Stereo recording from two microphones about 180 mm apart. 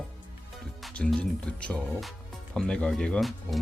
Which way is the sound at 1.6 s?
Centre (ahead or behind).